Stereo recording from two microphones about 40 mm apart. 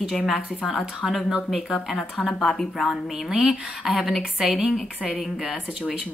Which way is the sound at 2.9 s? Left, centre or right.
Centre.